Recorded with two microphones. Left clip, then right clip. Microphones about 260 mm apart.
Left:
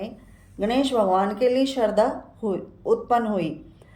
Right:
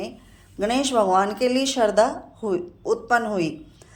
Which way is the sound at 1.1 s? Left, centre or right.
Centre.